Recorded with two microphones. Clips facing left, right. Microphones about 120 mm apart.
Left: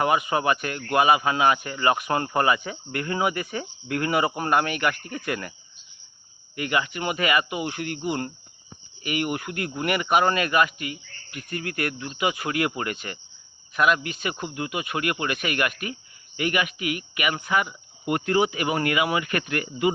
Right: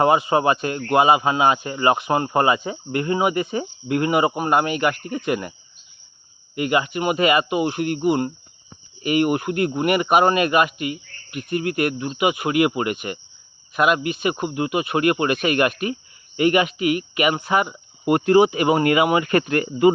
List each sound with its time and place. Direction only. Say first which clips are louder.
0.0 s speech: right 5 dB; 30° right (ahead or behind)
6.6 s speech: right 5 dB; 25° right (ahead or behind)